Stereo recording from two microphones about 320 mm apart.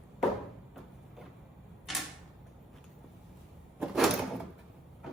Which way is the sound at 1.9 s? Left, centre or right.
Centre.